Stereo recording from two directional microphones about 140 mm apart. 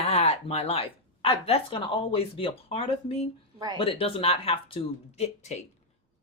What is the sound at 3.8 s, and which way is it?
Speech, 45° left (ahead or behind).